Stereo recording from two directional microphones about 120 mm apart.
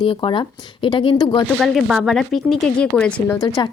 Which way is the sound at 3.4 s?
40° left (ahead or behind).